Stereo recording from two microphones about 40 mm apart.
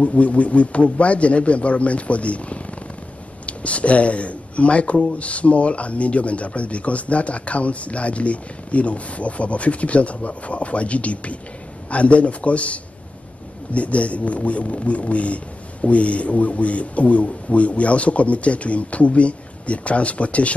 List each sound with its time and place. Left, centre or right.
0.0 s speech: left